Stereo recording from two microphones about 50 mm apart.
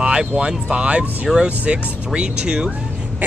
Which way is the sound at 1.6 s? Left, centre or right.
Right.